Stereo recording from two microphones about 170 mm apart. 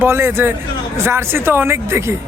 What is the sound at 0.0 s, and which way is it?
Speech, 15° right (ahead or behind).